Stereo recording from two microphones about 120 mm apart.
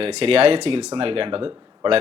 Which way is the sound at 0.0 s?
60° right (ahead or behind).